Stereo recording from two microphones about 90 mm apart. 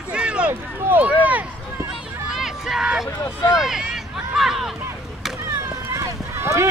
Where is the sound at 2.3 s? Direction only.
5° right (ahead or behind).